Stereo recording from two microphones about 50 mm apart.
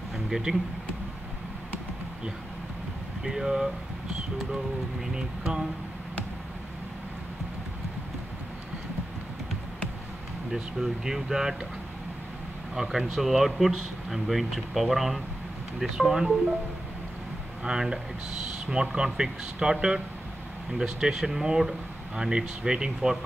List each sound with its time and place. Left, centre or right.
0.3 s speech: centre
3.3 s speech: centre
10.5 s speech: centre
12.7 s speech: centre
17.6 s speech: centre